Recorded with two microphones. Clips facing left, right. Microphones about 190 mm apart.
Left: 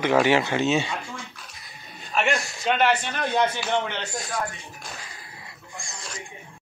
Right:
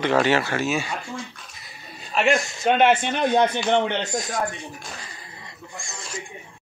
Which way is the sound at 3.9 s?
20° right (ahead or behind).